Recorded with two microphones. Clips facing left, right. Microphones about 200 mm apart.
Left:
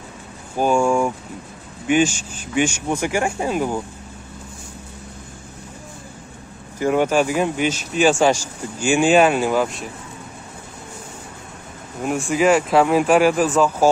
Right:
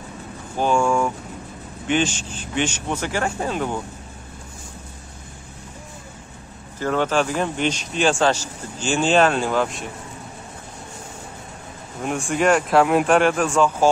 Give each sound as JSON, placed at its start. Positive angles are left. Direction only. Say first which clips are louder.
{"t": 0.6, "sound": "speech", "louder": "left 2 dB", "side_deg": 10}
{"t": 6.8, "sound": "speech", "louder": "left 3 dB", "side_deg": 15}
{"t": 12.0, "sound": "speech", "louder": "left 3 dB", "side_deg": 0}